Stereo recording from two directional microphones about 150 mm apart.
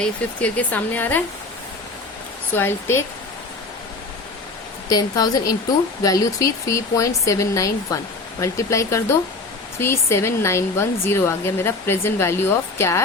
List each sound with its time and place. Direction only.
0.0 s speech: 10° left (ahead or behind)
2.6 s speech: 15° left (ahead or behind)
4.9 s speech: 25° left (ahead or behind)